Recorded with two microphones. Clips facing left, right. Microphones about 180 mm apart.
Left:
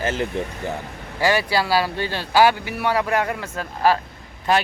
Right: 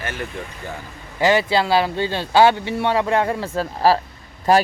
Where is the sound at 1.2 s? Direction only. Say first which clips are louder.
Right 3 dB; 20° right (ahead or behind).